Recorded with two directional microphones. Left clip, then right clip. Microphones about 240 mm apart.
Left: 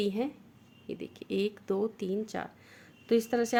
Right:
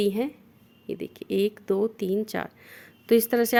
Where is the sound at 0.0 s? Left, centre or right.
Right.